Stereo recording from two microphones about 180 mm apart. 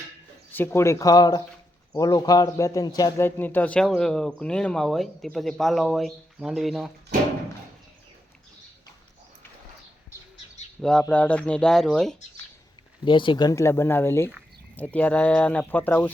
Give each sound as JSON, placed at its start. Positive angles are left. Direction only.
{"t": 0.5, "sound": "a man's voice", "side_deg": 10}
{"t": 10.8, "sound": "a man's voice", "side_deg": 0}
{"t": 13.1, "sound": "speech", "side_deg": 25}